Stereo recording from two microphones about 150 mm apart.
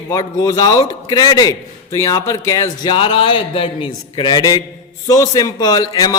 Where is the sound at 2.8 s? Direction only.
35° left (ahead or behind).